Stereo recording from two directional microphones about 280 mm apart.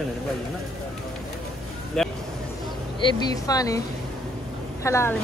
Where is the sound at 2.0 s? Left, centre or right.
Centre.